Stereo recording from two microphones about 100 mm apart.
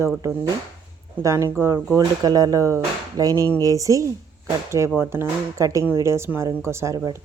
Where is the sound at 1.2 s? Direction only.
30° right (ahead or behind).